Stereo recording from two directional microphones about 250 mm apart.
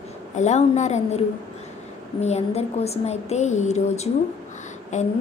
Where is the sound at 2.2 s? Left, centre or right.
Left.